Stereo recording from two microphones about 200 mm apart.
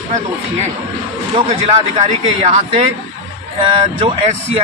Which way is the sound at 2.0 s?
35° right (ahead or behind).